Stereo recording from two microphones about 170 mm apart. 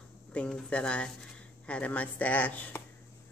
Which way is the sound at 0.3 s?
5° left (ahead or behind).